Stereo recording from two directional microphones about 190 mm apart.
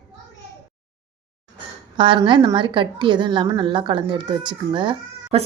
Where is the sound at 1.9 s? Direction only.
25° right (ahead or behind).